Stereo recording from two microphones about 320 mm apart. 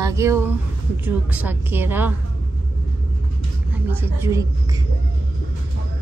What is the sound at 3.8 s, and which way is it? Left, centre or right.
Speech, centre.